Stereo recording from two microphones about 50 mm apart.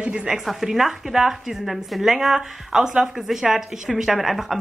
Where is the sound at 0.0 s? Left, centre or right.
Right.